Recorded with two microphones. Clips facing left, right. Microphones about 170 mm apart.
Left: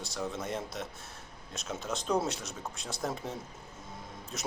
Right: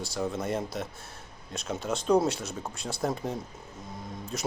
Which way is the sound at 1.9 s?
Centre (ahead or behind).